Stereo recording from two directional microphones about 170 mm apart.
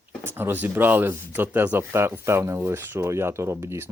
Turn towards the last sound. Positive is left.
turn(degrees=-15)  # may be behind; listen again after turning